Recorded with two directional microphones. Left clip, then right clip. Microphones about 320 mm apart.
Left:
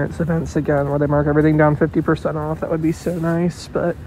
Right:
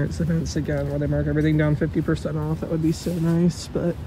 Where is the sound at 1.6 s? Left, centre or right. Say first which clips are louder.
Left 8 dB; centre.